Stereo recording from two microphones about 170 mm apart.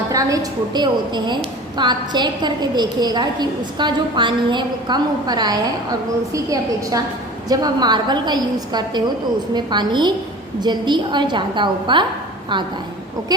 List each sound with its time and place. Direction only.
0.1 s a woman's voice: 20° right (ahead or behind)